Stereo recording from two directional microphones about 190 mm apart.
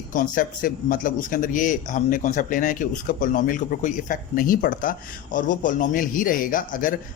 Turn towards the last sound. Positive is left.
turn(degrees=45)  # may be behind; listen again after turning